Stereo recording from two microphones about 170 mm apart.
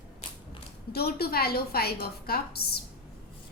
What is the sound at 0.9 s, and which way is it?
A woman's voice, 65° left (ahead or behind).